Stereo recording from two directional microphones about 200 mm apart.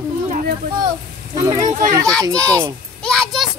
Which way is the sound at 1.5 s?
35° right (ahead or behind).